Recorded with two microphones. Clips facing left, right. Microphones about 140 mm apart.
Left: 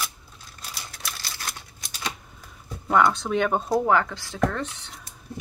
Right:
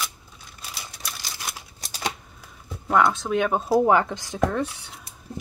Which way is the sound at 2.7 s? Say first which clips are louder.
Even; centre (ahead or behind).